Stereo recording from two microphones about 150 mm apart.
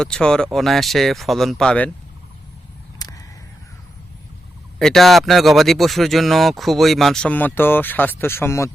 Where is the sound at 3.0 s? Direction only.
25° left (ahead or behind).